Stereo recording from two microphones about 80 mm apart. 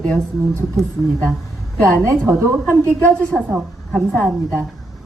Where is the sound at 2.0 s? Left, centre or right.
Right.